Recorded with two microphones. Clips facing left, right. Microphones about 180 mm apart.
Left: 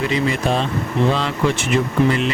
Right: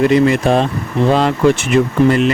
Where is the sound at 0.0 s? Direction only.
60° right (ahead or behind).